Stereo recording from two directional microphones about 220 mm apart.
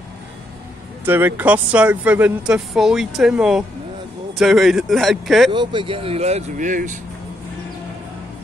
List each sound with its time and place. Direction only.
1.0 s speech: 10° right (ahead or behind)
5.5 s speech: 20° right (ahead or behind); by 7.0 s 35° right (ahead or behind)